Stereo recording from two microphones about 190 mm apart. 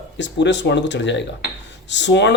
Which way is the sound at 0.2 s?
70° left (ahead or behind).